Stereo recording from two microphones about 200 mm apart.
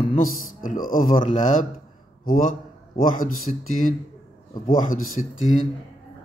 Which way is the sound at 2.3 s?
45° left (ahead or behind).